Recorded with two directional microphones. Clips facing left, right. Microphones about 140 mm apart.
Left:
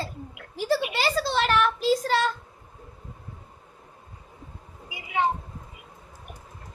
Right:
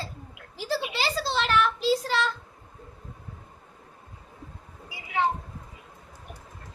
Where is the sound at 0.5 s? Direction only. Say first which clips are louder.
Left 4 dB; 55° left (ahead or behind).